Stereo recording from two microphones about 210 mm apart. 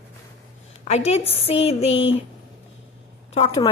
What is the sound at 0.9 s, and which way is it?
A woman's voice, 30° left (ahead or behind).